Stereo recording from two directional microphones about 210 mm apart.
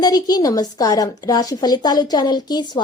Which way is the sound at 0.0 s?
20° left (ahead or behind).